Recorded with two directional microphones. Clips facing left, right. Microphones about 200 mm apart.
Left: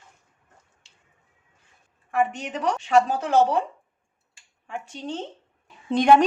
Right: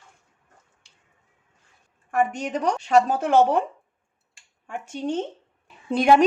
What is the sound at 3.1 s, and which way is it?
Speech, 55° right (ahead or behind).